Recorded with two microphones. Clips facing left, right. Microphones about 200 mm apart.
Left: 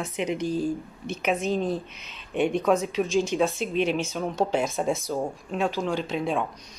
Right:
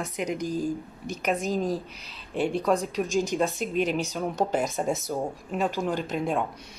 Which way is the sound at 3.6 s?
45° right (ahead or behind).